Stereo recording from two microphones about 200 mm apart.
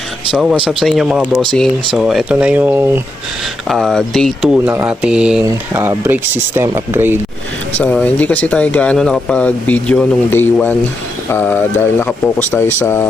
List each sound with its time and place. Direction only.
0.3 s speech: 5° right (ahead or behind)
7.8 s speech: 10° left (ahead or behind)